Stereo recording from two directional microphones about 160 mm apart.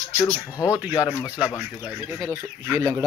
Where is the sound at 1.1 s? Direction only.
20° left (ahead or behind).